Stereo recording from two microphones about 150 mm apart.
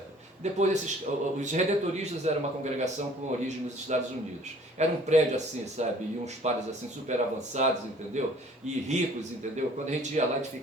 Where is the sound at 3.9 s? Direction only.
50° right (ahead or behind).